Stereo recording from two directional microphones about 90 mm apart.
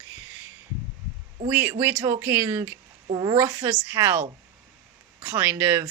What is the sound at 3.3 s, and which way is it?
Speech, 25° right (ahead or behind).